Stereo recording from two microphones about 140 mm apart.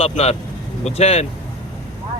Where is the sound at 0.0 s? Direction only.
45° left (ahead or behind).